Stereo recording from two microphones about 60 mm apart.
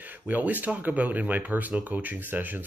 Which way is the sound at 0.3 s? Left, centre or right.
Right.